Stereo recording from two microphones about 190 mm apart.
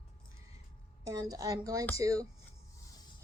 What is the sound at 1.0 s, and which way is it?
A woman's voice, 20° right (ahead or behind).